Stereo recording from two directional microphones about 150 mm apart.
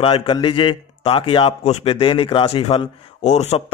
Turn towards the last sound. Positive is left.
turn(degrees=45)  # may be behind; listen again after turning